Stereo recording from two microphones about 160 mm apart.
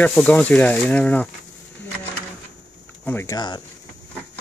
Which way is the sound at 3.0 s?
15° left (ahead or behind).